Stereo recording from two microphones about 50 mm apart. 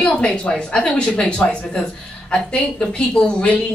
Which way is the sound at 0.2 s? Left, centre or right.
Left.